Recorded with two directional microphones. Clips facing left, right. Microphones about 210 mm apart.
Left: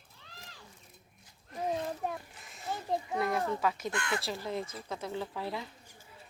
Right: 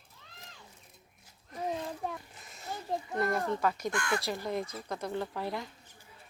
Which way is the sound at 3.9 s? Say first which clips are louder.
Right 2 dB; 20° left (ahead or behind).